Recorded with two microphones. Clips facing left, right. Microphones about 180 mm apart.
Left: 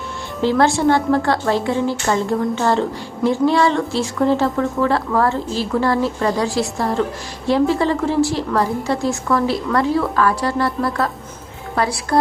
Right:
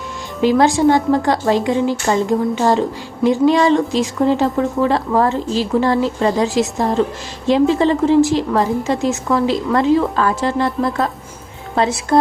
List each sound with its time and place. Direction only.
0.4 s a woman's voice: 15° right (ahead or behind)